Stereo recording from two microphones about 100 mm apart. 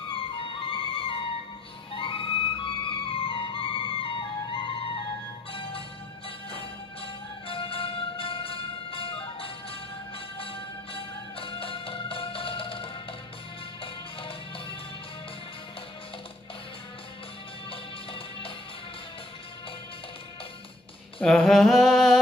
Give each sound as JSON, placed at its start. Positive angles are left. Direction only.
{"t": 0.1, "sound": "music", "side_deg": 60}
{"t": 17.6, "sound": "music", "side_deg": 65}
{"t": 21.2, "sound": "a sound", "side_deg": 5}